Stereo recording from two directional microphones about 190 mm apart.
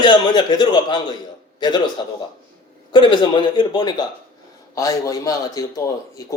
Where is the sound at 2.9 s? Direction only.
25° left (ahead or behind).